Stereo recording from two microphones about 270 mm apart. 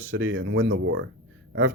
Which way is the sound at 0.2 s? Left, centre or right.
Right.